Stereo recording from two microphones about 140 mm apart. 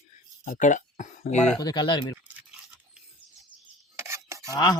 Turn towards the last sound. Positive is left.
turn(degrees=30)  # may be behind; listen again after turning